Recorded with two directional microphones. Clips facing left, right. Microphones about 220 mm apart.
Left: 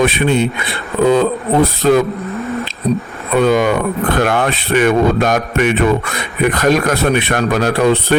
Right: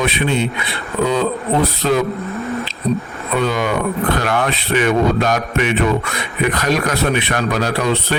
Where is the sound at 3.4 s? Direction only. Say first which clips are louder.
Left 6 dB; 50° left (ahead or behind).